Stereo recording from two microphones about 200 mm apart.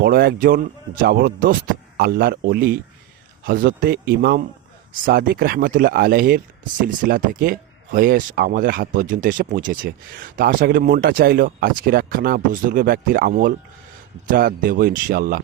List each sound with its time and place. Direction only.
0.0 s speech: 50° right (ahead or behind)